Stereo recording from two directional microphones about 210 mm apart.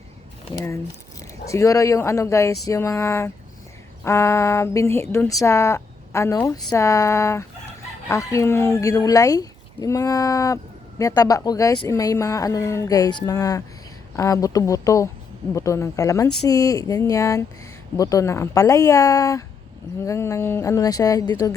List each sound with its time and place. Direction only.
0.5 s speech: 25° left (ahead or behind)